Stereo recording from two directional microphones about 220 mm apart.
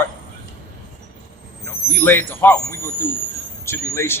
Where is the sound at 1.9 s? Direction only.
10° left (ahead or behind).